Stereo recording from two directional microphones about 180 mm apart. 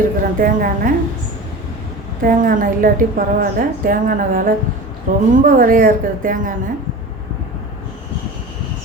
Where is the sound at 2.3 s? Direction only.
50° right (ahead or behind).